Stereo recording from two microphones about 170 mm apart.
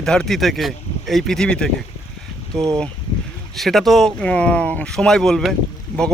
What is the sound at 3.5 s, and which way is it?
Speech, centre (ahead or behind).